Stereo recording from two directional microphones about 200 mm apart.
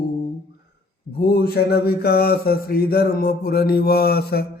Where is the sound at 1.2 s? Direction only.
50° left (ahead or behind).